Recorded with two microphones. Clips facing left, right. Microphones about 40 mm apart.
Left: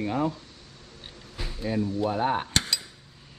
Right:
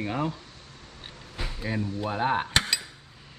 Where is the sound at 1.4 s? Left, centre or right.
Centre.